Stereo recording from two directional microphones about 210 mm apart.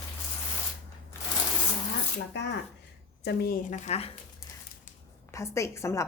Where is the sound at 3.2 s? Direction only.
40° left (ahead or behind).